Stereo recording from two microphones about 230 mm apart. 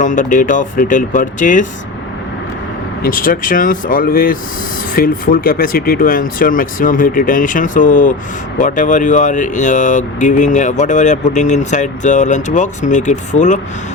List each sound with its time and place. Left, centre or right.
0.0 s speech: left
3.0 s speech: left